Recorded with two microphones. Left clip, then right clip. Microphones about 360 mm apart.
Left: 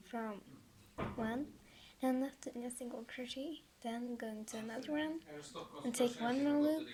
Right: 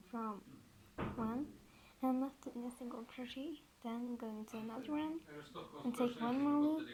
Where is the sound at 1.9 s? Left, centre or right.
Centre.